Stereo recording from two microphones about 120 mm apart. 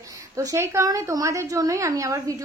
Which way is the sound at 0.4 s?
25° right (ahead or behind).